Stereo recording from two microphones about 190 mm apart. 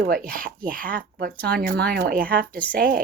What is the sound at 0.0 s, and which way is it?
Speech, 50° right (ahead or behind).